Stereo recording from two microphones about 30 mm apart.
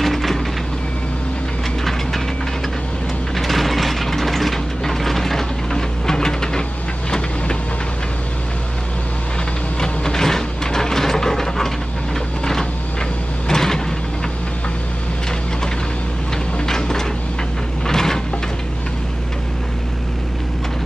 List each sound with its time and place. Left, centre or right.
0.0 s vehicle: centre
3.3 s mechanisms: centre; by 6.6 s left
9.8 s mechanisms: centre
13.5 s vehicle: centre
16.6 s a sound: centre